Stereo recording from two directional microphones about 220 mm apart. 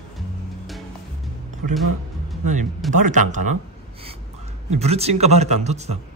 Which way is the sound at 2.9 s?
35° right (ahead or behind).